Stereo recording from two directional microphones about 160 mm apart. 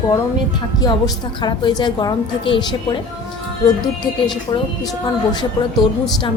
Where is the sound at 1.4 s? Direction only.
25° left (ahead or behind).